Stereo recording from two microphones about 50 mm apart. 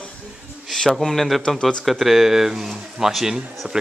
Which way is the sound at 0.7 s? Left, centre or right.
Centre.